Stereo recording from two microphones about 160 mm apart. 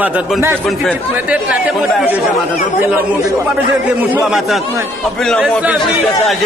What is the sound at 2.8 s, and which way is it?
Speech, 15° right (ahead or behind).